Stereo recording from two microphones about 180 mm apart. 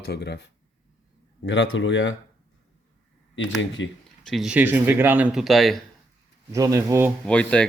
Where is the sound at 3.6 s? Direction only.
90° left.